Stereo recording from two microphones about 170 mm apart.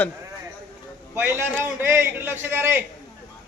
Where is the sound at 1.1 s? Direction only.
15° right (ahead or behind).